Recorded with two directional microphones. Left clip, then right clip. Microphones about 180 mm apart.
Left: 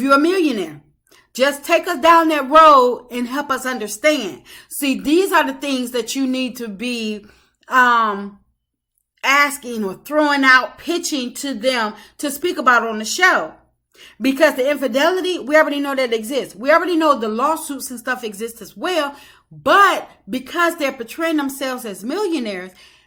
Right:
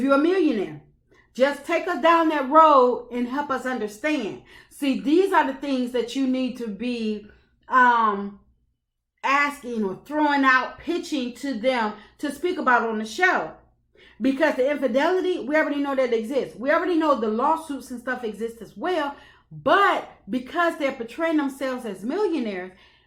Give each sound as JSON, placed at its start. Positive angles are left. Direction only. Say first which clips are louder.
{"t": 0.0, "sound": "speech", "louder": "left 5 dB", "side_deg": 15}